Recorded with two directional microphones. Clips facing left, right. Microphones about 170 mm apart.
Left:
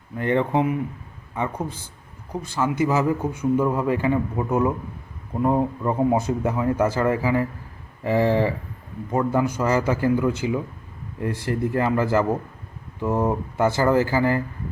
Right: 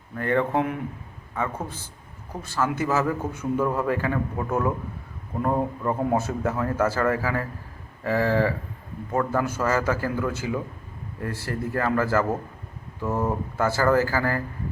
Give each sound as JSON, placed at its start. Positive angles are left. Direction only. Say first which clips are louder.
{"t": 0.2, "sound": "a man's voice", "louder": "left 2 dB", "side_deg": 20}